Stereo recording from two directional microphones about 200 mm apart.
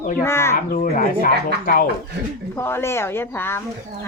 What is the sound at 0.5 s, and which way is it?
Speech, 45° left (ahead or behind).